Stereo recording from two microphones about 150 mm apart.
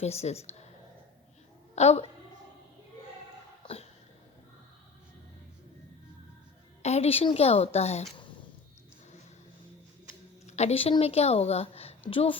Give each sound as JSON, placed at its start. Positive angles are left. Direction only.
{"t": 0.0, "sound": "a woman's voice", "side_deg": 45}
{"t": 1.7, "sound": "a woman's voice", "side_deg": 45}
{"t": 3.6, "sound": "a sound", "side_deg": 40}
{"t": 6.8, "sound": "a woman's voice", "side_deg": 45}
{"t": 10.4, "sound": "a sound", "side_deg": 50}
{"t": 11.0, "sound": "a woman's voice", "side_deg": 45}